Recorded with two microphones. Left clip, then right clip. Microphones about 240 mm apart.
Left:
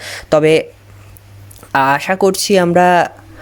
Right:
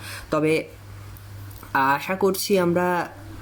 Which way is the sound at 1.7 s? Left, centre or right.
Left.